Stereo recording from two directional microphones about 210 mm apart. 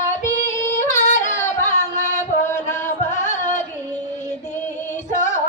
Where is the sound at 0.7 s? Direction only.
35° left (ahead or behind).